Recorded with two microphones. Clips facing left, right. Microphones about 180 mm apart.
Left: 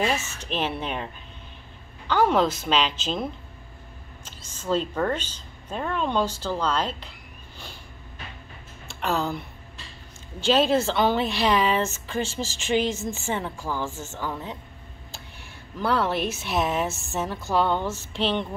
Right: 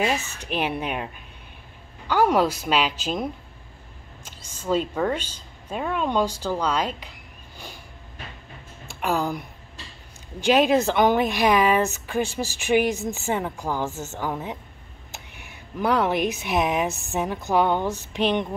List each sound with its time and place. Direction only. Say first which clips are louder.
0.4 s speech: right 2 dB; 10° right (ahead or behind)
8.8 s speech: right 2 dB; 10° right (ahead or behind)
10.4 s speech: right 2 dB; 15° right (ahead or behind)
15.8 s speech: right 3 dB; 15° right (ahead or behind)